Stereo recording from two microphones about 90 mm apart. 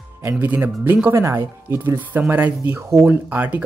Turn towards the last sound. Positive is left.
turn(degrees=-20)  # may be behind; listen again after turning